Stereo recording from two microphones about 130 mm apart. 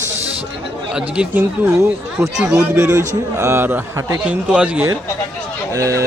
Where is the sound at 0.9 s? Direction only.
10° right (ahead or behind).